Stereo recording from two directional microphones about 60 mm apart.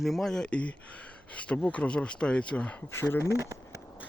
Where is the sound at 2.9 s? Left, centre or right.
Left.